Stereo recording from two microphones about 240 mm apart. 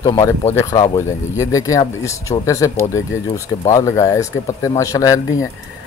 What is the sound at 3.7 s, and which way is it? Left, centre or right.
Speech, centre.